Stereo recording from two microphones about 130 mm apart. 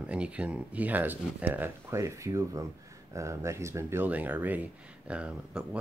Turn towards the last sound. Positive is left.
turn(degrees=-5)  # may be behind; listen again after turning